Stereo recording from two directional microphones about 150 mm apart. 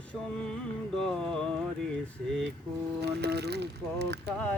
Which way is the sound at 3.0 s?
90° right.